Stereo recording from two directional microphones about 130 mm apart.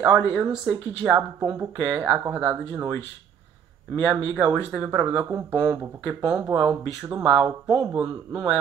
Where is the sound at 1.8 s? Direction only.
20° right (ahead or behind).